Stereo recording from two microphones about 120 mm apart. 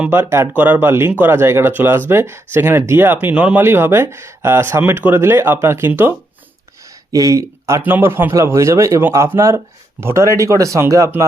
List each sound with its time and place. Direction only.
0.0 s speech: 20° right (ahead or behind)
6.8 s a sound: 30° right (ahead or behind)
7.9 s speech: 15° right (ahead or behind)